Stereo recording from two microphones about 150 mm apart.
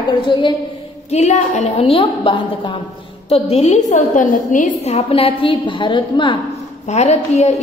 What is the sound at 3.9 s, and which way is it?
Speech, 65° left (ahead or behind).